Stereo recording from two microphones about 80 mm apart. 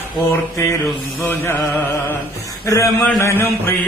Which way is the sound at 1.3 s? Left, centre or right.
Left.